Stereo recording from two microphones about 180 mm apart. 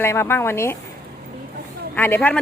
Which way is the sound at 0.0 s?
15° left (ahead or behind).